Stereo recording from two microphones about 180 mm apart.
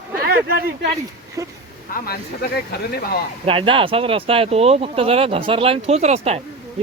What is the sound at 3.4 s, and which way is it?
Speech, 30° right (ahead or behind).